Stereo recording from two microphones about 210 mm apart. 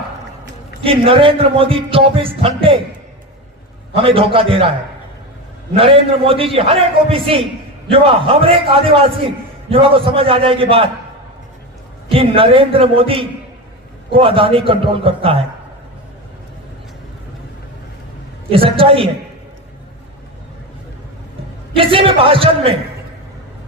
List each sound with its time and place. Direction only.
0.8 s a man's voice: 25° right (ahead or behind)
3.9 s a man's voice: 25° right (ahead or behind)
5.7 s a man's voice: 25° right (ahead or behind)
12.0 s a man's voice: 25° right (ahead or behind)
18.5 s a man's voice: 25° right (ahead or behind)
21.8 s a man's voice: 25° right (ahead or behind)